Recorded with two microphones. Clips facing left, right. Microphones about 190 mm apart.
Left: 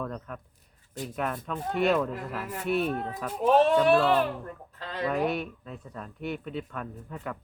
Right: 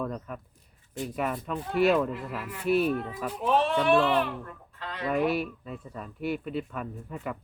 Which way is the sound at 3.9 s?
Centre (ahead or behind).